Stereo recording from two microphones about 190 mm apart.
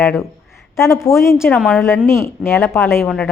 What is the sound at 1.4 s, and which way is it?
Speech, centre (ahead or behind).